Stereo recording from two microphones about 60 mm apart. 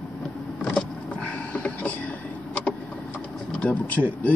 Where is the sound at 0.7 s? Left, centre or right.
Centre.